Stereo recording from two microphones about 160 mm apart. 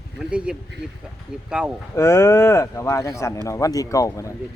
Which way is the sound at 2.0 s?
20° left (ahead or behind).